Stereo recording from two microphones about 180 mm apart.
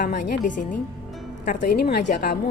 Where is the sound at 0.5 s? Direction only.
45° left (ahead or behind).